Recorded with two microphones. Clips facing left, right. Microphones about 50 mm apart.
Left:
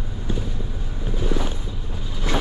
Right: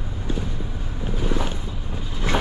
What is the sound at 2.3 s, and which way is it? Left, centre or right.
Train, right.